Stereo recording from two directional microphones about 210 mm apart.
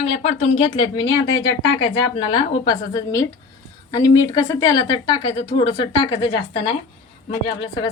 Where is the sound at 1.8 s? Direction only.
25° left (ahead or behind).